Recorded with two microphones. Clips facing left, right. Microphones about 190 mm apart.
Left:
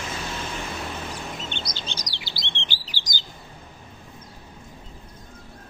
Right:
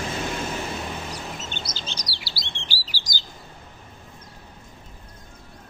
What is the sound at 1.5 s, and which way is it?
Chirp, 5° right (ahead or behind).